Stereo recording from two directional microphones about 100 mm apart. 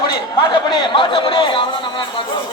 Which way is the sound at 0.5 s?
50° left (ahead or behind).